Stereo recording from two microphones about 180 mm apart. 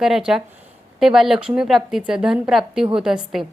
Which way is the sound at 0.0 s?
5° right (ahead or behind).